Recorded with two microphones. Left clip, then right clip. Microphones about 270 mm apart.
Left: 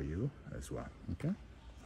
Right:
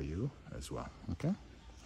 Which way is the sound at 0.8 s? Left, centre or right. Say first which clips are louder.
Right 5 dB; right.